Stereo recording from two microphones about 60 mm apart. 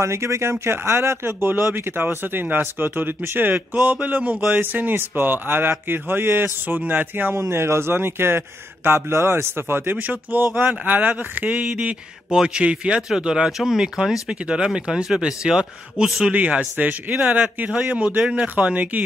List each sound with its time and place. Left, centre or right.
0.0 s speech: right
7.3 s a man's voice: right